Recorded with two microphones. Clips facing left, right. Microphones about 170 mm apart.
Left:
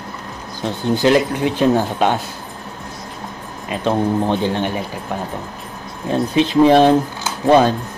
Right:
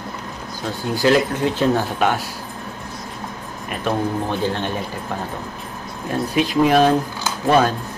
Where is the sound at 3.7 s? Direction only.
20° left (ahead or behind).